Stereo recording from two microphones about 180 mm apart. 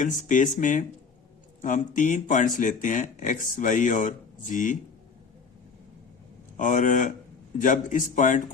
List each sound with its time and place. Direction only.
0.0 s speech: 45° left (ahead or behind)
6.6 s speech: 45° left (ahead or behind)